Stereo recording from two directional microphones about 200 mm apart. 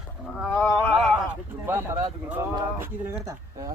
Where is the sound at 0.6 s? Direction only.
10° left (ahead or behind).